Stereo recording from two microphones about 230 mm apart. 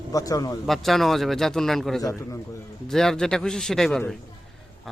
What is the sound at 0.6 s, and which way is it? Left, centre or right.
A man's voice, centre.